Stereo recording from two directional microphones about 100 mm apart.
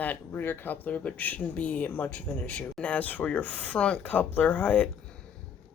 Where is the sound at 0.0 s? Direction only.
20° left (ahead or behind).